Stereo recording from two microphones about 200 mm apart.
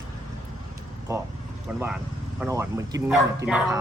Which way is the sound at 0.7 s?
15° right (ahead or behind).